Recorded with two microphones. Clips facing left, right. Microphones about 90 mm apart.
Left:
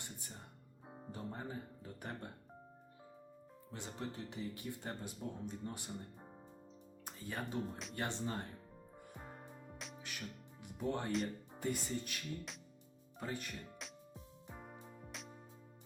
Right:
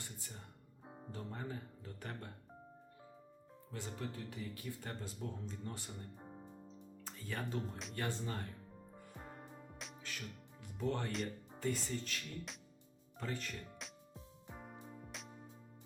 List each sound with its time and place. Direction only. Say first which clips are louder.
0.9 s music: left 1 dB; centre (ahead or behind)
1.1 s speech: even; 20° left (ahead or behind)
3.7 s speech: even; 20° left (ahead or behind)
9.1 s music: right 1 dB; centre (ahead or behind)
10.0 s music: right 1 dB; 15° left (ahead or behind)
11.1 s music: left 3 dB; centre (ahead or behind)
11.6 s speech: even; 15° left (ahead or behind)
14.5 s music: even; centre (ahead or behind)